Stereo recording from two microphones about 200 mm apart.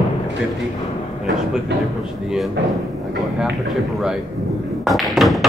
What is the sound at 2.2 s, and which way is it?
Speech, centre (ahead or behind).